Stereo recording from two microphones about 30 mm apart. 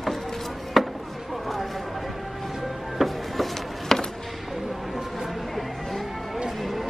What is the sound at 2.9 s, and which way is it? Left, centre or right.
Music, centre.